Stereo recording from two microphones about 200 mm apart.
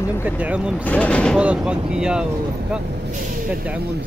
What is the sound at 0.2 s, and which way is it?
Speech, 5° right (ahead or behind).